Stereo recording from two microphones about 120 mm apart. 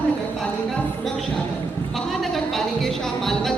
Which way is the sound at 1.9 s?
Centre (ahead or behind).